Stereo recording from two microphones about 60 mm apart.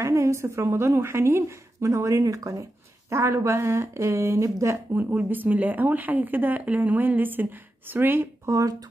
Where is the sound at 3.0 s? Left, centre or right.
Right.